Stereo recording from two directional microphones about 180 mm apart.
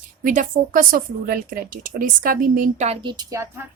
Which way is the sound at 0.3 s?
50° right (ahead or behind).